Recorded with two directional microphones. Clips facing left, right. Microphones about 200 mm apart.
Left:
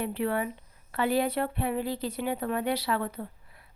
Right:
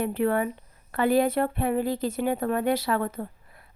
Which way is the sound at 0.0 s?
50° right (ahead or behind).